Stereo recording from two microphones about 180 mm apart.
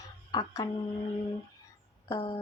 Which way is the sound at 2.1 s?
30° left (ahead or behind).